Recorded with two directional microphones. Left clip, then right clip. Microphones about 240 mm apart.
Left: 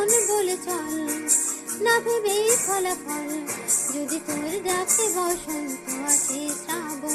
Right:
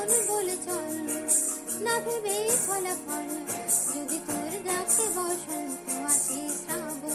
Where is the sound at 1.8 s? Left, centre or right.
Left.